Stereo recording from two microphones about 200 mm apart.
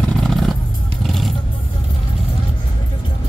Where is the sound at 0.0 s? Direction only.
Centre (ahead or behind).